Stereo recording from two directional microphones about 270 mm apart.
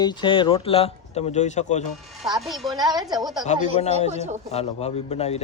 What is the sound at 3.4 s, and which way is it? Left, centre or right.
Speech, left.